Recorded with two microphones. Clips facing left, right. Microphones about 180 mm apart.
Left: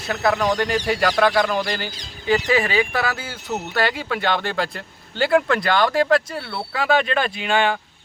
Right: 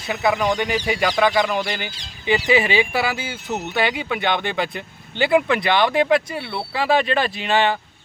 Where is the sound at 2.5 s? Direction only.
15° right (ahead or behind).